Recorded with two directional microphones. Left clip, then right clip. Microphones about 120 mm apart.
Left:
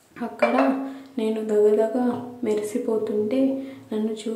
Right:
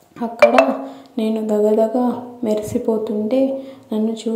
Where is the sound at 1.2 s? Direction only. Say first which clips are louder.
Right 3 dB; 35° right (ahead or behind).